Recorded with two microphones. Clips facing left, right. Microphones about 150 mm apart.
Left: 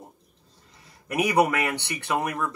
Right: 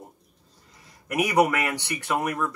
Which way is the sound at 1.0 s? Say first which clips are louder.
Even; 30° left (ahead or behind).